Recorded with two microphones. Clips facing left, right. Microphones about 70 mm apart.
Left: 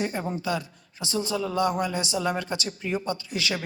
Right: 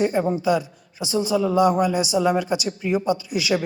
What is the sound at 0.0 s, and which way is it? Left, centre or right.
Speech, right.